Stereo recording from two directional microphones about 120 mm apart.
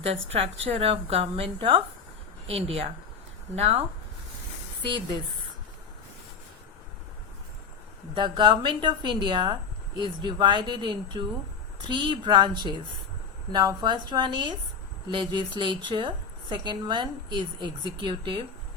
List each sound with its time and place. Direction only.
0.3 s a woman's voice: 55° right (ahead or behind)
2.5 s speech: 55° right (ahead or behind)
8.1 s a woman's voice: 40° right (ahead or behind)